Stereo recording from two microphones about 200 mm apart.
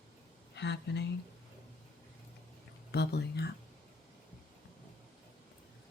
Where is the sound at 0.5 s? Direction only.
60° left (ahead or behind).